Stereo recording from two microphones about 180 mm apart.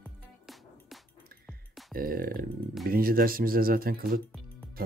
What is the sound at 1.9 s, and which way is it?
Speech, 55° right (ahead or behind).